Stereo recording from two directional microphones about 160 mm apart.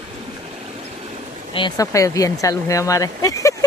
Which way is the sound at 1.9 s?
20° left (ahead or behind).